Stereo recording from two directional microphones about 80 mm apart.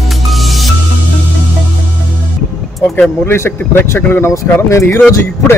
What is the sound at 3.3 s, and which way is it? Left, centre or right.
A man's voice, left.